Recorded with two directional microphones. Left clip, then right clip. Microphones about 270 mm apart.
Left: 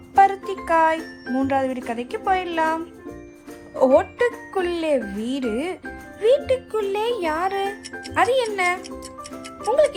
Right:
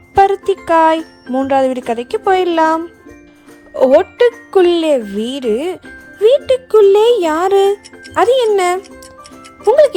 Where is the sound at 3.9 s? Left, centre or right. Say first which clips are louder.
Right 8 dB; right.